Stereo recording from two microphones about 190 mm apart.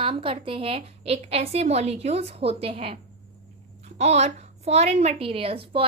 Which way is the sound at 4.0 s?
35° right (ahead or behind).